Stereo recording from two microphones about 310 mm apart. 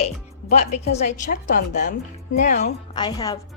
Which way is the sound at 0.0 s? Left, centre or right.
Left.